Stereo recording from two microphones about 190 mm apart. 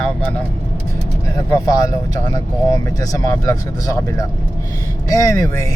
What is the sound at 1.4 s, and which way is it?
Speech, 20° left (ahead or behind).